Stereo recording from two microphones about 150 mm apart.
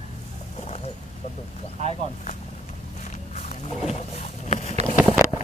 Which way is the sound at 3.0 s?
55° left (ahead or behind).